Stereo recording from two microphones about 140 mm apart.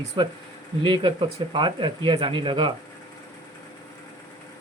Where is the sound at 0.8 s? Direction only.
35° right (ahead or behind).